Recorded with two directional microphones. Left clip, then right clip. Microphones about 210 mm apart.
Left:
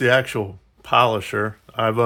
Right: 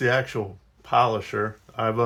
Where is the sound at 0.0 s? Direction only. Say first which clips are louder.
Left 5 dB; 45° left (ahead or behind).